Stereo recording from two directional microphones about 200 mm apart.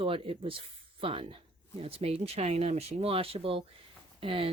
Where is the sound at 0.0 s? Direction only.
25° right (ahead or behind).